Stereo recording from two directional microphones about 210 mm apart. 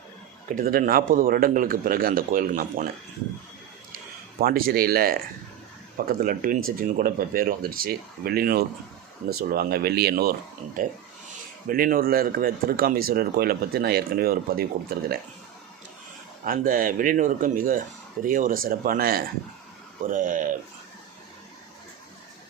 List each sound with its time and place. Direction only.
0.4 s speech: 40° right (ahead or behind)
4.4 s speech: 45° right (ahead or behind)
11.7 s speech: 45° right (ahead or behind)
16.5 s speech: 40° right (ahead or behind)